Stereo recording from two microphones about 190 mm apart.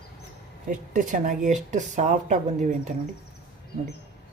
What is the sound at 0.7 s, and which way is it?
Speech, 45° right (ahead or behind).